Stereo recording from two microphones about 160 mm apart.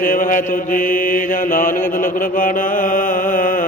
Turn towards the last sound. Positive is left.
turn(degrees=55)  # may be behind; listen again after turning